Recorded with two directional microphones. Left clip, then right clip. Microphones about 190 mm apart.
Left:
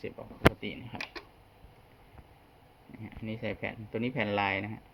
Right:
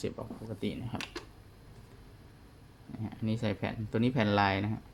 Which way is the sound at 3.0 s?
10° right (ahead or behind).